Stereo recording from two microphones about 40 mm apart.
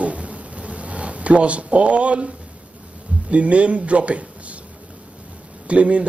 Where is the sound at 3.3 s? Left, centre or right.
Right.